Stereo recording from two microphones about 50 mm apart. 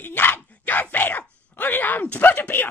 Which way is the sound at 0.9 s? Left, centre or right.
Left.